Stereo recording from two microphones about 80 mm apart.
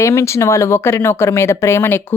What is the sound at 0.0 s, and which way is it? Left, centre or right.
Speech, left.